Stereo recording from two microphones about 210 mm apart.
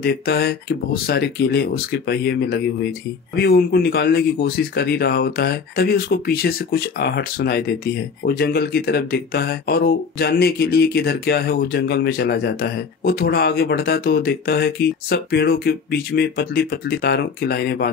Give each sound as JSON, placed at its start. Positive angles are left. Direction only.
{"t": 0.0, "sound": "speech", "side_deg": 50}